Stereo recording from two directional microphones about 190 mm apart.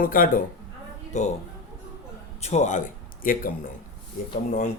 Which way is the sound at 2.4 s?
35° left (ahead or behind).